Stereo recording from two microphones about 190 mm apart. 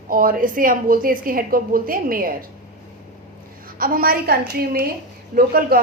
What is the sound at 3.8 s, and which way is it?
A woman's voice, 50° right (ahead or behind).